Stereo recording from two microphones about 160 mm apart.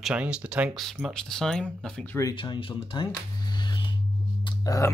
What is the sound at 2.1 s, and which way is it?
Speech, 25° left (ahead or behind).